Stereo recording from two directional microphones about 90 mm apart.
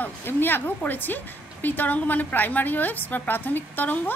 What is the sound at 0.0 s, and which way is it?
A woman's voice, 25° left (ahead or behind).